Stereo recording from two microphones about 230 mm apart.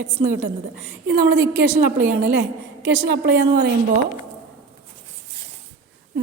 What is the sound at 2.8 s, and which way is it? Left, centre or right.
Speech, right.